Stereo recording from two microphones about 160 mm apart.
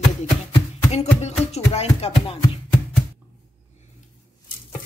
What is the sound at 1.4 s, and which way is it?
Speech, 40° left (ahead or behind).